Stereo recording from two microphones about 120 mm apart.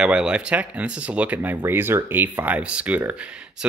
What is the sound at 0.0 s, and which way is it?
Speech, 5° right (ahead or behind).